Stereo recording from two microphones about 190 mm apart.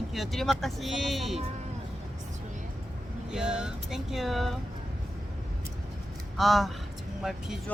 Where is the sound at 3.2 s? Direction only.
5° right (ahead or behind).